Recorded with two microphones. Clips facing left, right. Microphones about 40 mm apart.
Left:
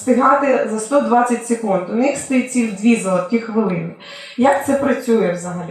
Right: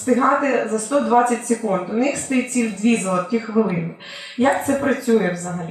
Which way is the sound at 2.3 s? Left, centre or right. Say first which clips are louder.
Left 3 dB; centre.